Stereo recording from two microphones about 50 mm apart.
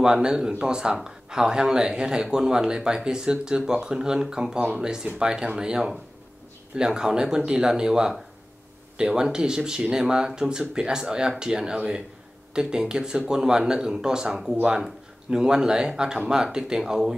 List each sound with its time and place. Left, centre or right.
0.0 s speech: centre